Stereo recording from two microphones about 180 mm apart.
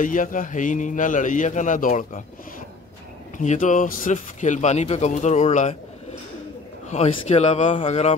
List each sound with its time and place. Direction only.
0.0 s a man's voice: 45° left (ahead or behind)
3.3 s speech: 45° left (ahead or behind)
6.9 s speech: 40° left (ahead or behind)